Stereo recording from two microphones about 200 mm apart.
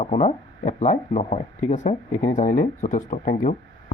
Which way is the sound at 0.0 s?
35° left (ahead or behind).